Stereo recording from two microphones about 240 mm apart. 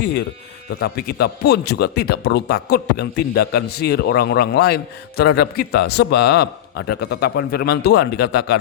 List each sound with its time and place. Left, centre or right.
0.7 s a man's voice: left